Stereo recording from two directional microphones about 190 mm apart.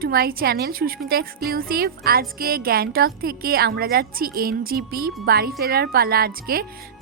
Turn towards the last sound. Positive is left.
turn(degrees=-50)  # may be behind; listen again after turning